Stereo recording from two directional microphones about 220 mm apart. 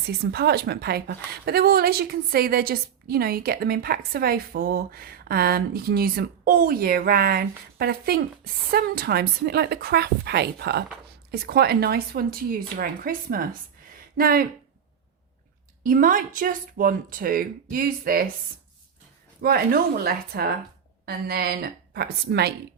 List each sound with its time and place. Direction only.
0.1 s a woman's voice: 45° right (ahead or behind)
15.8 s speech: 40° right (ahead or behind)
19.4 s a woman's voice: 45° right (ahead or behind)